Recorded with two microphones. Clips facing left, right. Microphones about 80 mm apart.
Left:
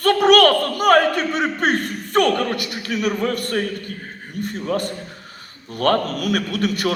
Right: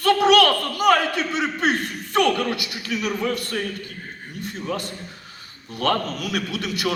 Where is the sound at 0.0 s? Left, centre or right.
Left.